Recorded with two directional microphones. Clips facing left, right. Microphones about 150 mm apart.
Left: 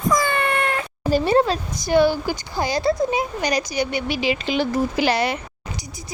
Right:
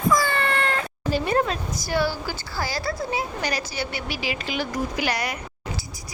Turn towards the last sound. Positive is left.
turn(degrees=25)  # may be behind; listen again after turning